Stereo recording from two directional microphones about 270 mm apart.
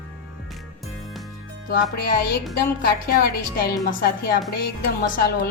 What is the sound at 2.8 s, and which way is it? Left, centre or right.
Speech, left.